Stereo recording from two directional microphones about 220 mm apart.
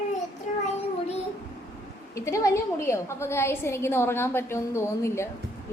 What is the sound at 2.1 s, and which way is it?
A woman's voice, 15° left (ahead or behind).